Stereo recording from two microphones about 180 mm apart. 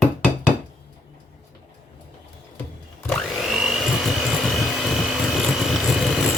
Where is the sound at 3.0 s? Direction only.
Centre (ahead or behind).